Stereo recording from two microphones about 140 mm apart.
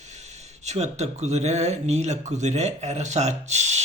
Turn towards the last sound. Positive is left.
turn(degrees=-55)  # may be behind; listen again after turning